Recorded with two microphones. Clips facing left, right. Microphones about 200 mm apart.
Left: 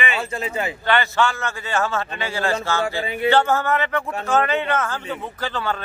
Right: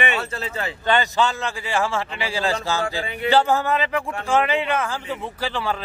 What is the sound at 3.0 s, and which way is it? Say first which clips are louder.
Speech: left 4 dB; 20° left (ahead or behind).